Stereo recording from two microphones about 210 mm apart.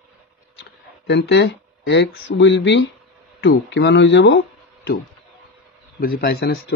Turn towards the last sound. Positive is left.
turn(degrees=50)  # may be behind; listen again after turning